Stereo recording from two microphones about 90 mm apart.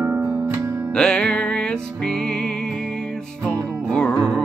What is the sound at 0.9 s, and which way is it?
Music, 10° left (ahead or behind).